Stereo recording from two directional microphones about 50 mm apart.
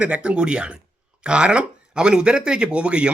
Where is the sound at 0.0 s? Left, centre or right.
Right.